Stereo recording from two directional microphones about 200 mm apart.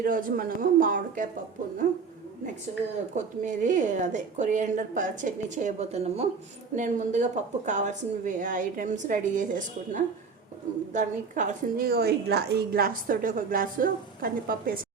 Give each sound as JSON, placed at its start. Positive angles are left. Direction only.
{"t": 0.0, "sound": "a woman's voice", "side_deg": -45}
{"t": 3.2, "sound": "a woman's voice", "side_deg": -40}